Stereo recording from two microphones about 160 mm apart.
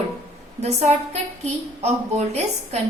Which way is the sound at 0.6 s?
45° right (ahead or behind).